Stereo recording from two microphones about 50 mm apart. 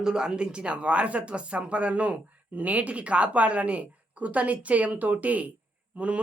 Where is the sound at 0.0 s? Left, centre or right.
Centre.